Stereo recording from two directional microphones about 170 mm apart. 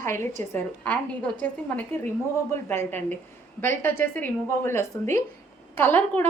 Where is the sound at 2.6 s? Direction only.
10° left (ahead or behind).